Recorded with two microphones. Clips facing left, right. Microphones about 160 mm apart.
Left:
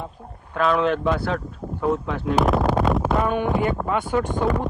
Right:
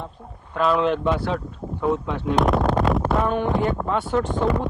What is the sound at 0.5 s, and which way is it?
A man's voice, centre (ahead or behind).